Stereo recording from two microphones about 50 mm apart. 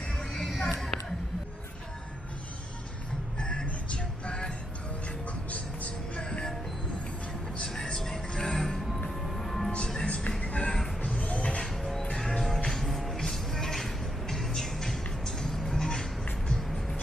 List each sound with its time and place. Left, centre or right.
0.6 s a sound: centre
3.3 s music: centre
5.5 s vehicle: left
6.2 s music: centre
7.7 s music: centre
10.0 s music: left
10.4 s a sound: left
11.1 s music: left
11.6 s music: centre